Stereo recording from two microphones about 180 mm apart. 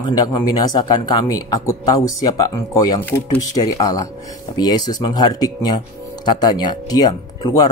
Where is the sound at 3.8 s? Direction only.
20° left (ahead or behind).